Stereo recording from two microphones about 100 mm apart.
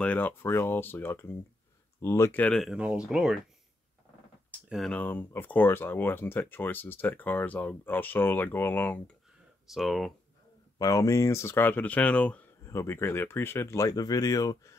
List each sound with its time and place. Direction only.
0.0 s speech: 15° left (ahead or behind)
2.4 s speech: 5° left (ahead or behind)
2.7 s speech: 5° right (ahead or behind)
4.6 s speech: centre (ahead or behind)
4.9 s speech: 20° left (ahead or behind)
9.7 s speech: centre (ahead or behind)
10.8 s speech: 35° left (ahead or behind); by 12.4 s 15° left (ahead or behind)
12.6 s speech: 25° left (ahead or behind)